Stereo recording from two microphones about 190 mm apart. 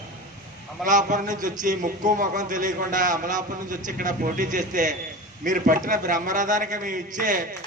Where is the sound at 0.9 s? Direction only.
40° right (ahead or behind).